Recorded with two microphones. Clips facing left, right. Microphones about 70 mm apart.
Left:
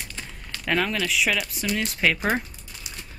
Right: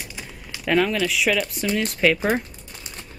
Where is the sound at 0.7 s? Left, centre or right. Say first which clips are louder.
Right 4 dB; centre.